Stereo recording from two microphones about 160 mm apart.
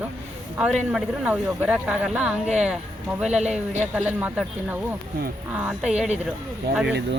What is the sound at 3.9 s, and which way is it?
Speech, 10° right (ahead or behind).